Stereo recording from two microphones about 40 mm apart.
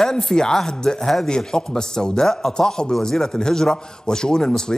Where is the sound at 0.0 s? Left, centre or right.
Centre.